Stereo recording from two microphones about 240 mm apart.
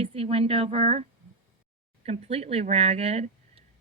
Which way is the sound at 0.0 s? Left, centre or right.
Right.